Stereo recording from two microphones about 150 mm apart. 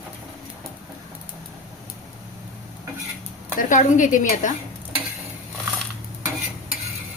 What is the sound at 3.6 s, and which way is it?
Speech, 60° left (ahead or behind).